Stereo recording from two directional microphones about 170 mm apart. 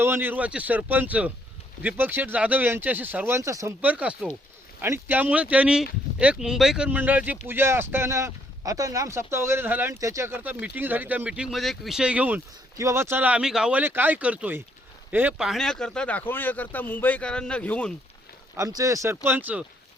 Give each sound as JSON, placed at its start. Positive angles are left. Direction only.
{"t": 0.0, "sound": "speech", "side_deg": -10}
{"t": 18.5, "sound": "speech", "side_deg": -20}